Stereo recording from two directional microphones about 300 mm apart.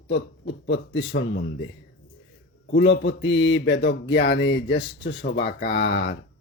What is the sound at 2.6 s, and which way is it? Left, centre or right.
Mantra, left.